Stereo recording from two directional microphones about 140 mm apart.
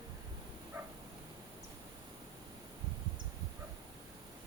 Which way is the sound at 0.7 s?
15° right (ahead or behind).